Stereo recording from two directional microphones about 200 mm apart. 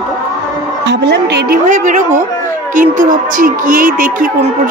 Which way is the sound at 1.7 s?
40° right (ahead or behind).